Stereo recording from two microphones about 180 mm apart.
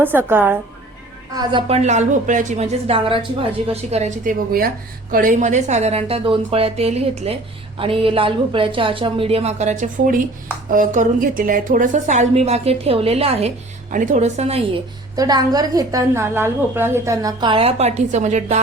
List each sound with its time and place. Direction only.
0.0 s a woman's voice: 10° right (ahead or behind)
1.3 s a woman's voice: 20° right (ahead or behind)
1.6 s a woman's voice: 35° right (ahead or behind)
13.9 s a woman's voice: 45° right (ahead or behind)
15.1 s a woman's voice: 20° right (ahead or behind); by 18.6 s 40° right (ahead or behind)